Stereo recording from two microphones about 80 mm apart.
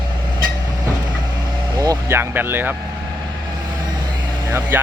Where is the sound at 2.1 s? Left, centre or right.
Right.